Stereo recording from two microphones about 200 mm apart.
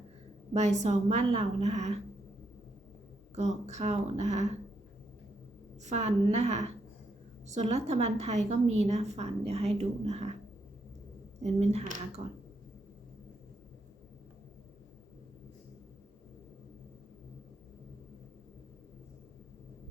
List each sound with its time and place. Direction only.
0.5 s a woman's voice: 35° right (ahead or behind)
3.3 s a woman's voice: 35° right (ahead or behind)
5.8 s a woman's voice: 35° right (ahead or behind)
11.4 s a woman's voice: 35° right (ahead or behind)